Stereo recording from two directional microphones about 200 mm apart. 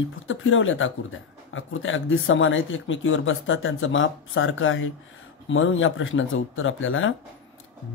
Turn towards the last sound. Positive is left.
turn(degrees=75)  # may be behind; listen again after turning